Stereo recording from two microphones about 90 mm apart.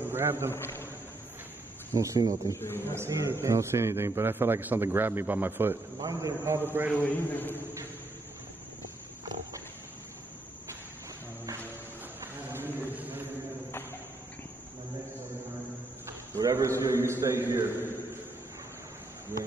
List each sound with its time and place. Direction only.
0.0 s a man's voice: 25° right (ahead or behind)
0.6 s a man's voice: 25° left (ahead or behind)
2.0 s a man's voice: 40° right (ahead or behind)
2.5 s a man's voice: 25° left (ahead or behind)
2.9 s a man's voice: 30° right (ahead or behind)
5.9 s a man's voice: 40° right (ahead or behind)
6.7 s a man's voice: 20° right (ahead or behind)
7.0 s a man's voice: 20° left (ahead or behind)
12.2 s a sound: 25° right (ahead or behind)
16.3 s a man's voice: 35° right (ahead or behind)